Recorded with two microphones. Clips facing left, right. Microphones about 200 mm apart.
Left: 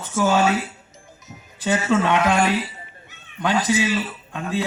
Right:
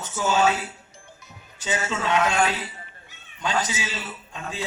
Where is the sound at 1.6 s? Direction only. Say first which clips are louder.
Left 8 dB; 60° left (ahead or behind).